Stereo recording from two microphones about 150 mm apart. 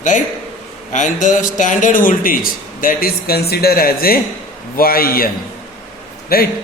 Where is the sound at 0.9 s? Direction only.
55° left (ahead or behind).